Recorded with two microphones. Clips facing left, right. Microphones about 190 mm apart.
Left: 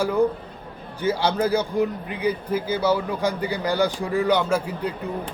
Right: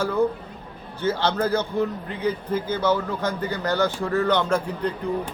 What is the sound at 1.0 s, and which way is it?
A man's voice, 10° left (ahead or behind).